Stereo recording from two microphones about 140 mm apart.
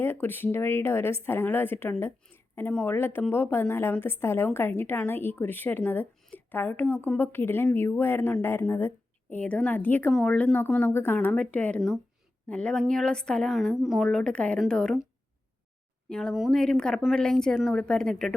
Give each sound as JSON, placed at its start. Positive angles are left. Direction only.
{"t": 0.0, "sound": "speech", "side_deg": 15}
{"t": 16.0, "sound": "speech", "side_deg": 5}